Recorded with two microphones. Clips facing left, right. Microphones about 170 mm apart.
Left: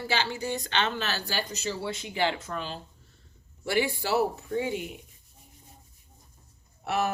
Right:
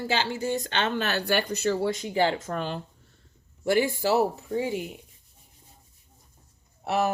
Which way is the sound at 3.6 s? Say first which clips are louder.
Right 4 dB; 45° right (ahead or behind).